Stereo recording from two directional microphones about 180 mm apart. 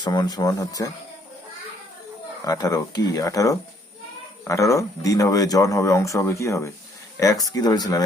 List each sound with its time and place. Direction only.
0.0 s speech: 20° left (ahead or behind)
2.4 s speech: 20° left (ahead or behind)